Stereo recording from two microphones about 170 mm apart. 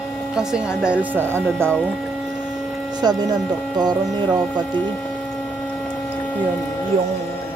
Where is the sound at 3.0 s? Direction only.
25° right (ahead or behind).